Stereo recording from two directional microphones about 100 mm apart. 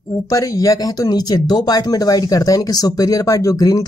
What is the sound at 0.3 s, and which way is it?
Speech, 35° left (ahead or behind).